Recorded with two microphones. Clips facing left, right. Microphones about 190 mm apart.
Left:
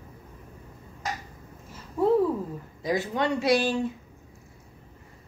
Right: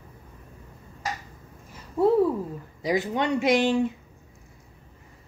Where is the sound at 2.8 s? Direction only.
15° right (ahead or behind).